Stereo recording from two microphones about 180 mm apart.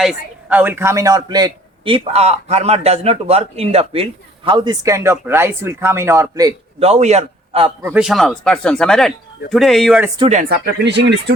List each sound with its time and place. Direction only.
0.0 s a man's voice: 5° right (ahead or behind)
6.7 s a man's voice: 35° right (ahead or behind)
7.8 s speech: 10° right (ahead or behind)
10.5 s speech: 70° right (ahead or behind)